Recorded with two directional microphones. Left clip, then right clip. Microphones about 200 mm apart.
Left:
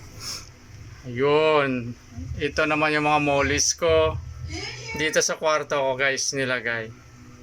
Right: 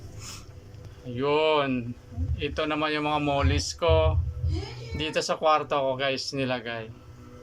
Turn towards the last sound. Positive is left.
turn(degrees=-5)  # may be behind; listen again after turning